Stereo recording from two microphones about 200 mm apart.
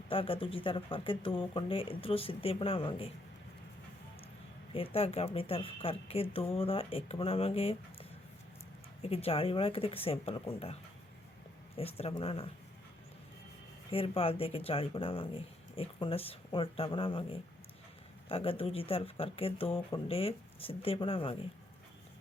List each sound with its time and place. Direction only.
0.1 s a woman's voice: 25° left (ahead or behind)
4.7 s a woman's voice: 30° left (ahead or behind)
11.8 s a woman's voice: 30° left (ahead or behind)
13.9 s a woman's voice: 30° left (ahead or behind)
18.3 s a woman's voice: 25° left (ahead or behind)